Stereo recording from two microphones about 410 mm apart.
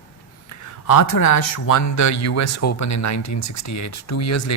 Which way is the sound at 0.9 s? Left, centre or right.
Left.